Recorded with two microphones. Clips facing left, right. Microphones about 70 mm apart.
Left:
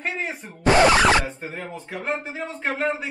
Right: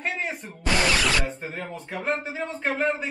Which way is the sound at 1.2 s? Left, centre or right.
Centre.